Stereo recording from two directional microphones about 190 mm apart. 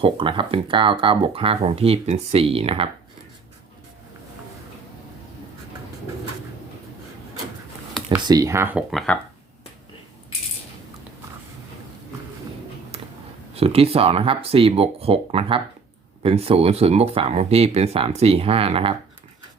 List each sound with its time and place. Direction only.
0.0 s speech: 30° right (ahead or behind)
8.2 s speech: 20° right (ahead or behind)
8.9 s speech: centre (ahead or behind)
13.5 s speech: 30° right (ahead or behind)